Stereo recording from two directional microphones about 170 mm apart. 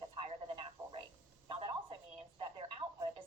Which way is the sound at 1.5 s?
30° right (ahead or behind).